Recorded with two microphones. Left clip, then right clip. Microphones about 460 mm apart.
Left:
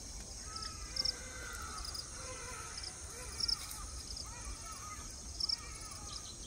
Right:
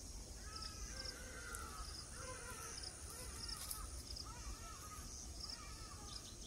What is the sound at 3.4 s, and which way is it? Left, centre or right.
Crow, right.